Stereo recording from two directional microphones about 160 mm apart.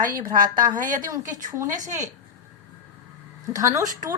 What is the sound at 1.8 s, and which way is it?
Speech, 55° right (ahead or behind).